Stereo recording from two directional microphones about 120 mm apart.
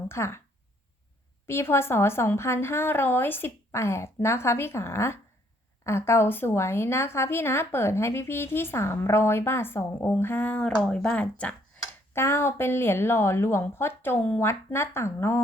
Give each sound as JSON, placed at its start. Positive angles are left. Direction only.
{"t": 0.1, "sound": "a woman's voice", "side_deg": 20}
{"t": 1.5, "sound": "a woman's voice", "side_deg": 20}
{"t": 12.1, "sound": "a woman's voice", "side_deg": 20}